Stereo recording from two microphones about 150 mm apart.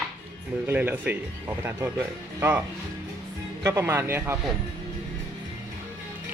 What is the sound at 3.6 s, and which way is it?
Speech, 15° right (ahead or behind).